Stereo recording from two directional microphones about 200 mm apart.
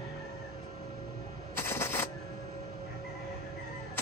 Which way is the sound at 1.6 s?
10° left (ahead or behind).